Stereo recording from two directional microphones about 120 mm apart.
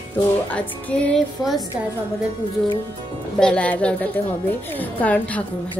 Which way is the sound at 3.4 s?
10° left (ahead or behind).